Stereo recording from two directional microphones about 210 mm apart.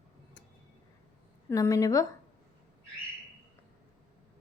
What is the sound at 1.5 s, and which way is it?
Speech, 15° left (ahead or behind).